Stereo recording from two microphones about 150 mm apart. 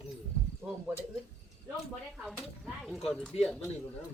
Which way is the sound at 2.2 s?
Centre (ahead or behind).